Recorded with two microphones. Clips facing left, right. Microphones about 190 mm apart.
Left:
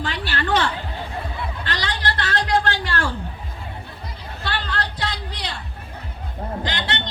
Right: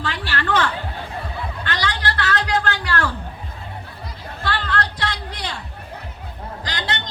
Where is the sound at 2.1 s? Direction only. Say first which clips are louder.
Left 2 dB; 25° left (ahead or behind).